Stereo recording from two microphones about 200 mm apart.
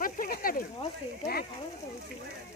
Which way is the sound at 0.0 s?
45° left (ahead or behind).